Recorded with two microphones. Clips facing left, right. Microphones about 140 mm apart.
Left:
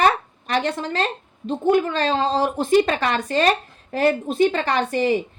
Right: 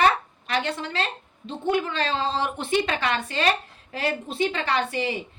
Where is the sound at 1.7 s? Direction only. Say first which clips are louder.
Left 5 dB; 40° left (ahead or behind).